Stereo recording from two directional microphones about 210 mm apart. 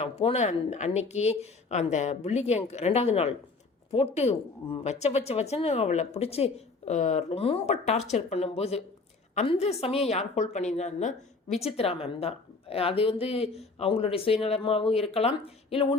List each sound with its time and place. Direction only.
0.0 s a woman's voice: 30° left (ahead or behind)